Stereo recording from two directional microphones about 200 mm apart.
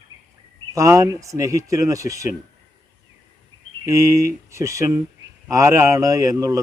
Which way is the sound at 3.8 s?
15° right (ahead or behind).